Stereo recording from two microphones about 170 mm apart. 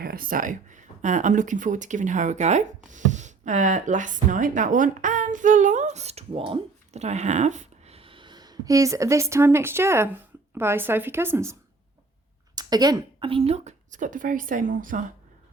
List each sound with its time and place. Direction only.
0.0 s speech: 60° right (ahead or behind); by 11.5 s 15° right (ahead or behind)
12.5 s a woman's voice: 25° right (ahead or behind); by 15.0 s 50° right (ahead or behind)